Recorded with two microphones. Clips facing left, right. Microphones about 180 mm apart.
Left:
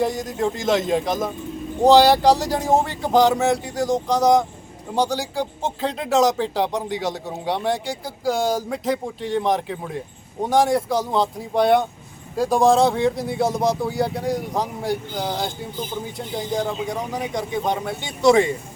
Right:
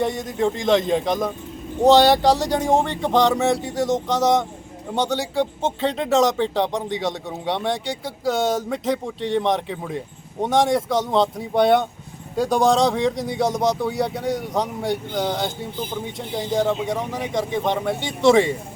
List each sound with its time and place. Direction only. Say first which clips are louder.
0.0 s a man's voice: even; centre (ahead or behind)